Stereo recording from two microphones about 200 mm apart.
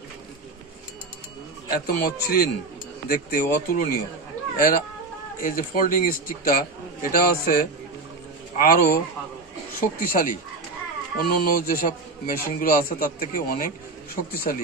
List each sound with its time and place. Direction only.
1.7 s a man's voice: 50° left (ahead or behind)